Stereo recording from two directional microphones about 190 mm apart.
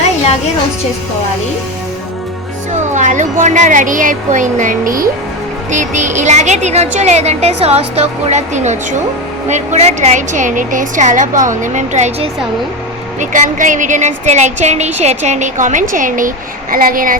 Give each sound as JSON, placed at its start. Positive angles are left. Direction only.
{"t": 2.9, "sound": "a woman's voice", "side_deg": -40}